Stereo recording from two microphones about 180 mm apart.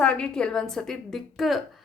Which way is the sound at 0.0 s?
5° left (ahead or behind).